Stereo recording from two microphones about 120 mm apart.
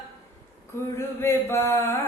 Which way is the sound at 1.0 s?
20° left (ahead or behind).